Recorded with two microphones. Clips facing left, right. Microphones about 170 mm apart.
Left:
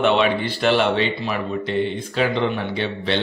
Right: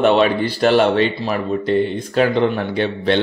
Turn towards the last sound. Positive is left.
turn(degrees=-50)  # may be behind; listen again after turning